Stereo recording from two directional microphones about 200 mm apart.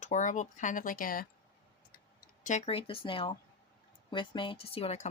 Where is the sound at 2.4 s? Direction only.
35° left (ahead or behind).